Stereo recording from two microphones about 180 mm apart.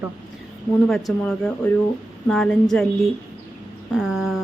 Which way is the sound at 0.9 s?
Centre (ahead or behind).